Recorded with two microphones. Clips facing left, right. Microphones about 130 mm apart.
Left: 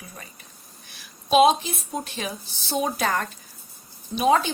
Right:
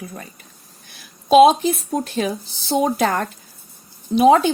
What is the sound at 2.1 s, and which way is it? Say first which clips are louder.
Speech: right 10 dB; 50° right (ahead or behind).